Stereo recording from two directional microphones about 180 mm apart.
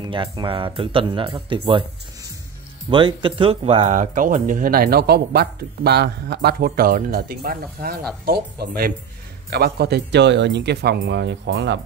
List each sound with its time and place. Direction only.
0.0 s speech: 25° right (ahead or behind)
2.9 s speech: 25° right (ahead or behind); by 11.8 s 80° right